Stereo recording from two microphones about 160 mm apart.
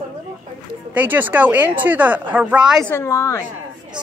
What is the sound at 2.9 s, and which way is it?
Speech, 15° left (ahead or behind).